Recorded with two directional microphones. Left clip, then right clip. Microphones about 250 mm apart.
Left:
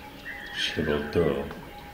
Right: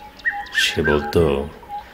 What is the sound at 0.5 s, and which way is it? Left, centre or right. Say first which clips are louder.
Music: right 9 dB; right.